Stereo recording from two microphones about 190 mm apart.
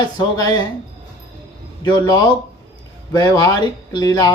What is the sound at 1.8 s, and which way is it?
Speech, 20° left (ahead or behind).